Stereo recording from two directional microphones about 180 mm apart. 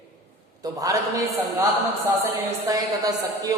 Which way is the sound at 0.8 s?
20° right (ahead or behind).